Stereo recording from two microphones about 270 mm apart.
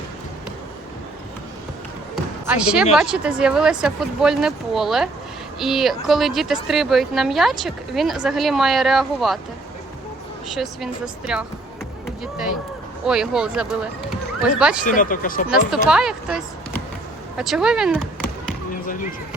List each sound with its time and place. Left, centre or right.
2.5 s a woman's voice: centre
10.5 s a woman's voice: centre
12.0 s music: centre
13.1 s a woman's voice: centre
14.8 s speech: left
15.4 s a woman's voice: centre